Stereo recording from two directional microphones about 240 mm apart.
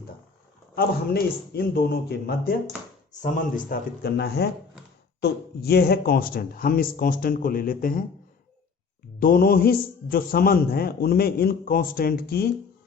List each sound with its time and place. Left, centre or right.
0.8 s a man's voice: left
9.2 s a man's voice: left